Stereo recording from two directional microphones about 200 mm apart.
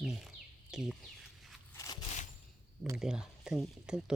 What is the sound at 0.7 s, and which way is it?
Chicken, 5° right (ahead or behind).